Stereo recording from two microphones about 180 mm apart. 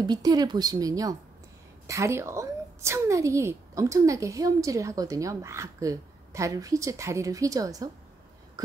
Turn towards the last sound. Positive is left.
turn(degrees=-20)  # may be behind; listen again after turning